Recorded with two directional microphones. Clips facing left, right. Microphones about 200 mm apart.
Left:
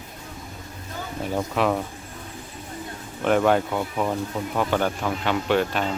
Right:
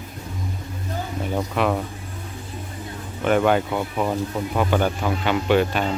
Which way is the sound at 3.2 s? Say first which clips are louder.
Right 1 dB; centre (ahead or behind).